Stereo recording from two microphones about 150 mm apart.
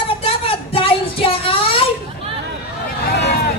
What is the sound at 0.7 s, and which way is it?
Child singing, 35° left (ahead or behind).